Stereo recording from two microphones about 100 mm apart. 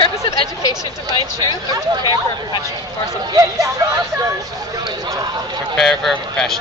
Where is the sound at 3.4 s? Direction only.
35° right (ahead or behind).